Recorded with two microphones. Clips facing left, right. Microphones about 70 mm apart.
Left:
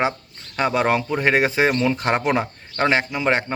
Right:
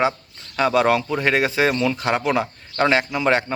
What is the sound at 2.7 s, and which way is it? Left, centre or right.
Speech, centre.